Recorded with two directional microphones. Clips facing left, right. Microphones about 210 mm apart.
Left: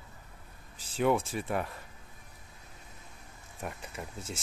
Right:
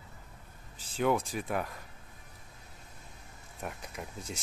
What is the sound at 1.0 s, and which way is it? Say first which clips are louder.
Speech: left 1 dB; centre (ahead or behind).